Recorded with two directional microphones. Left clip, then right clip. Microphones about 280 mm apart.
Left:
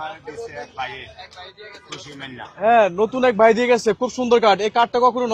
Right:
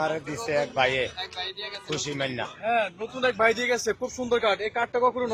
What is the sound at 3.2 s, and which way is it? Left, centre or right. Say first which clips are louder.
Speech: left 7 dB; left.